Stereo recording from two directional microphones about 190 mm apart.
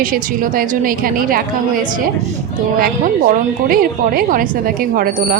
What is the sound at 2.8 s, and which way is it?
A woman's voice, 45° right (ahead or behind).